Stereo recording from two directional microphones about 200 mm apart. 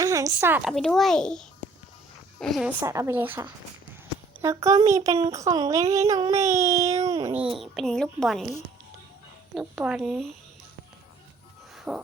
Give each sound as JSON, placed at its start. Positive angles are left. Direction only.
{"t": 0.0, "sound": "speech", "side_deg": -15}
{"t": 0.7, "sound": "a woman's voice", "side_deg": 0}
{"t": 2.8, "sound": "speech", "side_deg": -15}
{"t": 7.4, "sound": "a woman's voice", "side_deg": 0}
{"t": 9.6, "sound": "a woman's voice", "side_deg": -5}
{"t": 11.9, "sound": "speech", "side_deg": -10}